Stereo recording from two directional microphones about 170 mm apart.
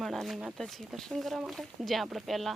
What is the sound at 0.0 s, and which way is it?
Speech, centre (ahead or behind).